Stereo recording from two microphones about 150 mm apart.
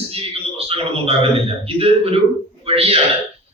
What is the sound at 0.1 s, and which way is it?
A man's voice, 40° right (ahead or behind).